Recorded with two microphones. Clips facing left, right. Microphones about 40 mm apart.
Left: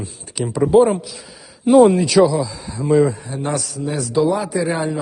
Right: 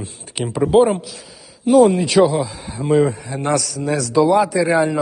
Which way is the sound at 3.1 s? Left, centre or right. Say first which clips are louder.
Right 3 dB; right.